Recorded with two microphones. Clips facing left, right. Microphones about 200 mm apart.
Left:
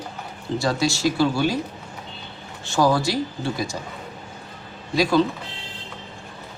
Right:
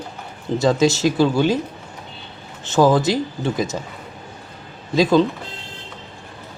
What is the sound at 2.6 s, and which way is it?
Speech, 20° right (ahead or behind).